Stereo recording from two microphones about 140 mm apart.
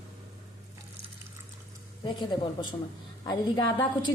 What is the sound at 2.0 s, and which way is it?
Speech, 35° left (ahead or behind).